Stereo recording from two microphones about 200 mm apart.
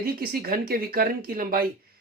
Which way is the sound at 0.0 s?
45° right (ahead or behind).